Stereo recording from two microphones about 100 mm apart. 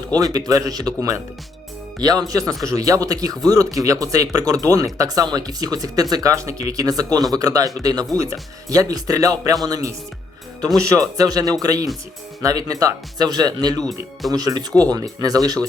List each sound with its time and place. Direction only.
0.2 s speech: 40° right (ahead or behind)
13.8 s speech: centre (ahead or behind)
14.3 s speech: 40° right (ahead or behind)